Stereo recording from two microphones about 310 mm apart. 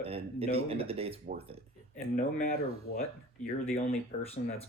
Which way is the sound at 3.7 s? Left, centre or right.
Centre.